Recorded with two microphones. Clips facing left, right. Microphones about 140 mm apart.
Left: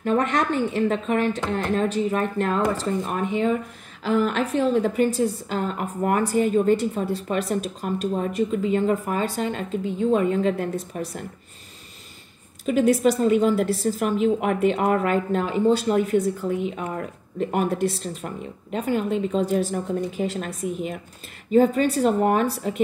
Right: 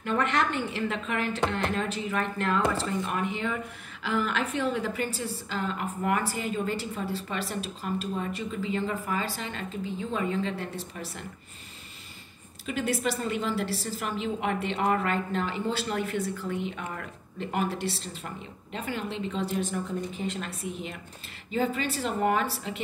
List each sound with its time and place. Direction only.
0.0 s speech: 40° left (ahead or behind)
12.6 s speech: 45° left (ahead or behind)